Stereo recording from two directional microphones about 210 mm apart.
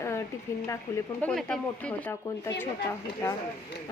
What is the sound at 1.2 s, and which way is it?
Speech, 5° left (ahead or behind).